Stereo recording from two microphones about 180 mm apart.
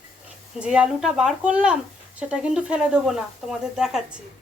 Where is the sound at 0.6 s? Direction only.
5° right (ahead or behind).